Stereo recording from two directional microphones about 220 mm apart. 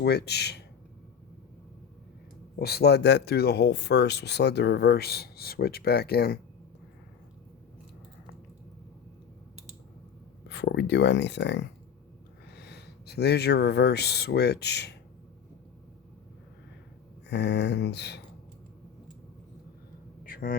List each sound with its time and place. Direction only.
0.0 s speech: 50° left (ahead or behind)
2.6 s speech: 45° left (ahead or behind)
10.5 s speech: 50° left (ahead or behind)
17.2 s speech: 50° left (ahead or behind)
20.2 s a sound: 40° left (ahead or behind)